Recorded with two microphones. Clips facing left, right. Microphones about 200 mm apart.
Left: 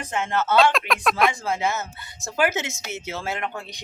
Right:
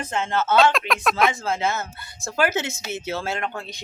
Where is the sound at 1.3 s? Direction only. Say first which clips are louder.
Right 1 dB; 15° left (ahead or behind).